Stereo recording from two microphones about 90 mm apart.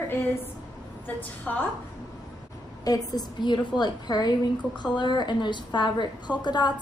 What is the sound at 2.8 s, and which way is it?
A woman's voice, 45° left (ahead or behind).